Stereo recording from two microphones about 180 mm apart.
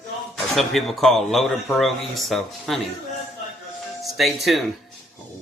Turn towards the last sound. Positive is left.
turn(degrees=0)  # may be behind; listen again after turning